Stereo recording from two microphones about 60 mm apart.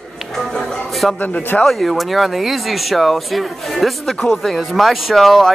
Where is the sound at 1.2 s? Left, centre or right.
Left.